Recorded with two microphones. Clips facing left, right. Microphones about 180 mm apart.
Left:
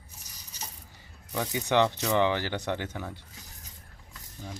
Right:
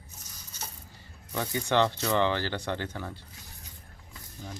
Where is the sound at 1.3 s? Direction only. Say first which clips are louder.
Left 1 dB; 15° left (ahead or behind).